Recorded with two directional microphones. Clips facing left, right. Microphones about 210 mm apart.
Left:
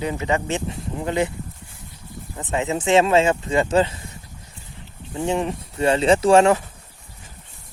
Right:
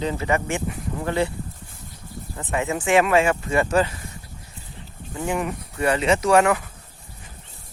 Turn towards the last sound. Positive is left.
turn(degrees=30)  # may be behind; listen again after turning